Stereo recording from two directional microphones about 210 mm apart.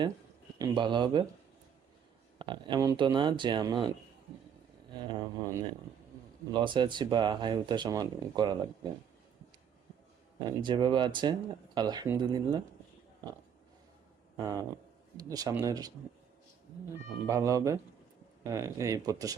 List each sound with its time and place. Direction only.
0.6 s speech: 20° right (ahead or behind)
2.4 s speech: 20° right (ahead or behind)
4.9 s speech: 20° right (ahead or behind)
10.4 s speech: 20° right (ahead or behind)
14.3 s speech: 15° right (ahead or behind)
17.2 s speech: 15° right (ahead or behind)